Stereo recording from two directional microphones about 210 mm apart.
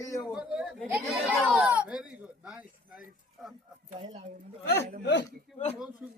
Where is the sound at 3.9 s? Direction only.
30° right (ahead or behind).